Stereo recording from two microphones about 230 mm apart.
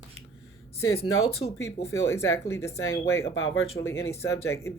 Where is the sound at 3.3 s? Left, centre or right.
Left.